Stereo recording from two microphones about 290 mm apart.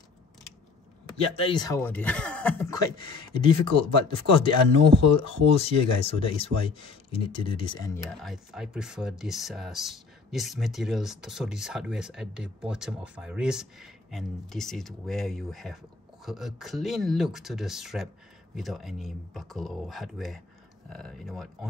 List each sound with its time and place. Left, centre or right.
1.1 s speech: centre
8.2 s speech: centre